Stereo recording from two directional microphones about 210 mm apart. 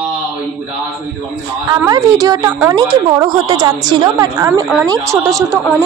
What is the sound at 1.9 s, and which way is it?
A woman's voice, 15° right (ahead or behind).